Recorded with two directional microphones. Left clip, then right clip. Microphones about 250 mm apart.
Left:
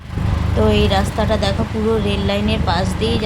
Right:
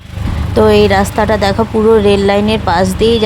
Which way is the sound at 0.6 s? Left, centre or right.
Right.